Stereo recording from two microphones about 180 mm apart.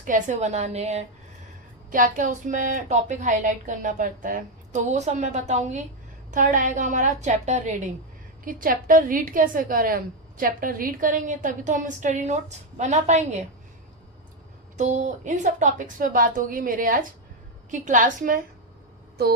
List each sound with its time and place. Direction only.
0.0 s a woman's voice: 45° right (ahead or behind)
1.9 s a woman's voice: 45° right (ahead or behind)
14.8 s a woman's voice: 40° right (ahead or behind)